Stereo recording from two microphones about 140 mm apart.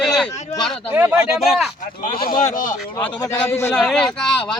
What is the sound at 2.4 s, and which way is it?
Speech, 70° left (ahead or behind).